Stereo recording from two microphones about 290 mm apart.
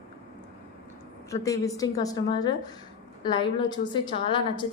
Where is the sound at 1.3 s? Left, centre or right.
Centre.